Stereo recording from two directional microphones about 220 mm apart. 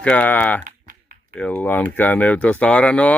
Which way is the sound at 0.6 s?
40° right (ahead or behind).